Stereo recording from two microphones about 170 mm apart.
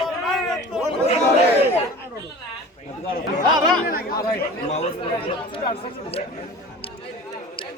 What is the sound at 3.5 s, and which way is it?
Speech, 25° right (ahead or behind).